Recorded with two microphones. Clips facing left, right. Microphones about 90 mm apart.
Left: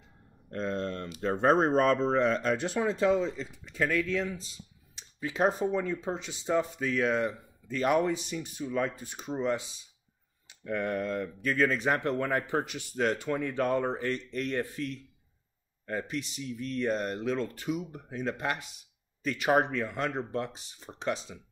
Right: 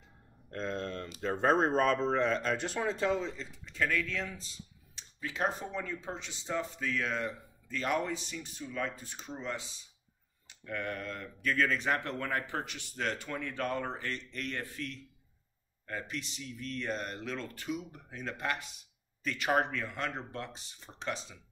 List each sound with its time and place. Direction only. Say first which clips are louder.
0.5 s speech: left 4 dB; 5° left (ahead or behind)
4.9 s computer keyboard: left 6 dB; 15° left (ahead or behind)
5.8 s speech: left 7 dB; 20° left (ahead or behind)
15.9 s speech: left 6 dB; 10° left (ahead or behind)